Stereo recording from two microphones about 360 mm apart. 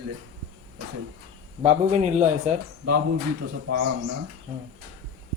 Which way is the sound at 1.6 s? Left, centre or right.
Centre.